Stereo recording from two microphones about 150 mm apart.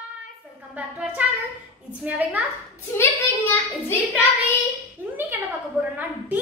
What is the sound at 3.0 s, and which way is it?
A woman's voice, 15° left (ahead or behind).